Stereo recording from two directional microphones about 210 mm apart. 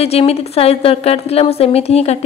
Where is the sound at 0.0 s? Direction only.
30° left (ahead or behind).